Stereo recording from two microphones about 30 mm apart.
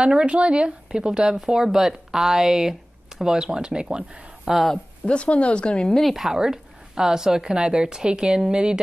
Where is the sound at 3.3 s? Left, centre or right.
Right.